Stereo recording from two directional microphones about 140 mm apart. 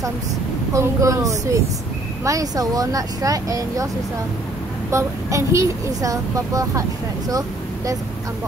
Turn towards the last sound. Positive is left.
turn(degrees=-25)  # may be behind; listen again after turning